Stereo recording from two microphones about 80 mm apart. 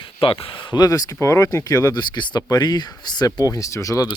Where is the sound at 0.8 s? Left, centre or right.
Left.